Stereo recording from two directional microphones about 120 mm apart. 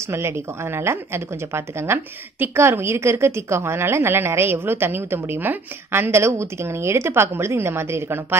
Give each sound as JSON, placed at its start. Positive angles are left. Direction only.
{"t": 0.7, "sound": "a woman's voice", "side_deg": -20}